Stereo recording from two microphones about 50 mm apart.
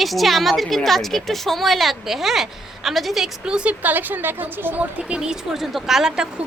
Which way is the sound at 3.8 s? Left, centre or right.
Right.